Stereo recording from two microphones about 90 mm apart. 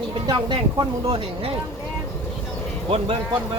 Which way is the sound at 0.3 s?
60° right (ahead or behind).